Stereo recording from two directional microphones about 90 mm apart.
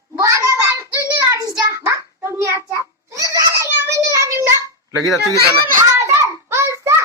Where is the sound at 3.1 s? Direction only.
40° right (ahead or behind).